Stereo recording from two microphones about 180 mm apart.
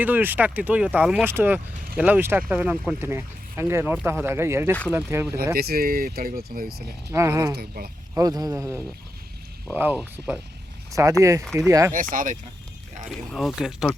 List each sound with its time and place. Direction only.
0.0 s speech: 10° right (ahead or behind)
5.5 s speech: 60° right (ahead or behind)
7.1 s speech: 15° right (ahead or behind)
7.5 s speech: 60° right (ahead or behind)
8.1 s speech: 20° right (ahead or behind)
11.4 s speech: centre (ahead or behind)
11.7 s speech: 20° right (ahead or behind)
11.9 s speech: 45° right (ahead or behind)
13.1 s speech: centre (ahead or behind)